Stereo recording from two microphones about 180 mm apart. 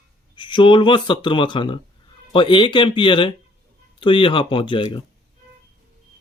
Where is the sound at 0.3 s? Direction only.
25° left (ahead or behind).